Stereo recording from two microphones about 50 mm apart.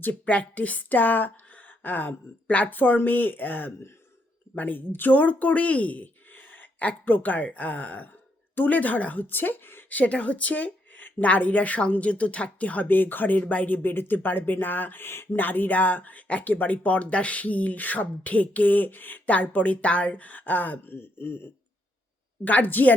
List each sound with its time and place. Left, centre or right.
0.1 s speech: left
3.7 s speech: left
4.5 s speech: left
5.1 s speech: left
9.9 s speech: left
15.4 s speech: left
20.9 s a man's voice: left
22.4 s speech: left